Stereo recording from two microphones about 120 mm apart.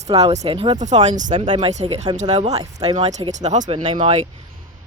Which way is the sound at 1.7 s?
70° right (ahead or behind).